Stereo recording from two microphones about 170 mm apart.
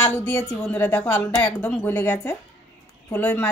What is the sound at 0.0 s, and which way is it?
A woman's voice, 10° left (ahead or behind).